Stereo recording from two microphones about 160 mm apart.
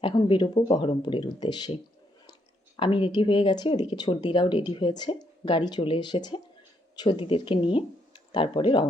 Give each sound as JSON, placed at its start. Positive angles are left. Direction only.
{"t": 0.0, "sound": "speech", "side_deg": 30}
{"t": 2.7, "sound": "speech", "side_deg": 30}